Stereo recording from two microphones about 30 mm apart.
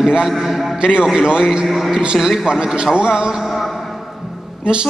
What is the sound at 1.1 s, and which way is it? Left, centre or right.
Speech, right.